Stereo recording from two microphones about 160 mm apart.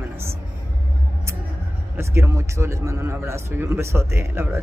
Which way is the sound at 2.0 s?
15° right (ahead or behind).